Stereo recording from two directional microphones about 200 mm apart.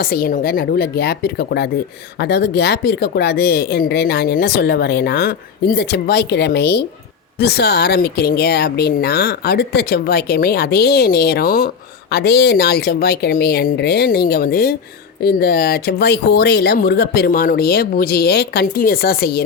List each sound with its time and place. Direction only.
0.0 s speech: 45° left (ahead or behind)